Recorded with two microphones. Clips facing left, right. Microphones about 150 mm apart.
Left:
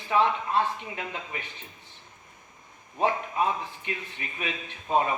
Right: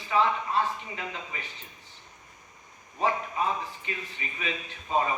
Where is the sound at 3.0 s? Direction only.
60° left (ahead or behind).